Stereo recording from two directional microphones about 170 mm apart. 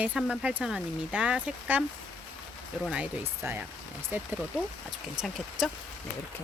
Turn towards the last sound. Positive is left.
turn(degrees=0)  # may be behind; listen again after turning